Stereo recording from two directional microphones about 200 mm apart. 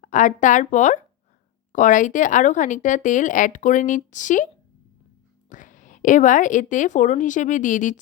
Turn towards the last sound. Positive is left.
turn(degrees=40)  # may be behind; listen again after turning